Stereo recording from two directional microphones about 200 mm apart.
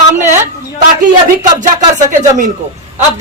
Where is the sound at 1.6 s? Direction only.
40° right (ahead or behind).